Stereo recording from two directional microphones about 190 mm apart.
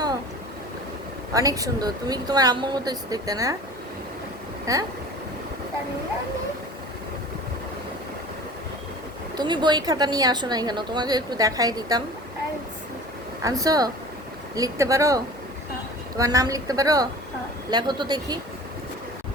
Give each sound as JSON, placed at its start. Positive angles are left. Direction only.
{"t": 1.3, "sound": "a woman's voice", "side_deg": -20}
{"t": 4.6, "sound": "a sound", "side_deg": -20}
{"t": 9.3, "sound": "a woman's voice", "side_deg": -25}
{"t": 13.4, "sound": "a woman's voice", "side_deg": -20}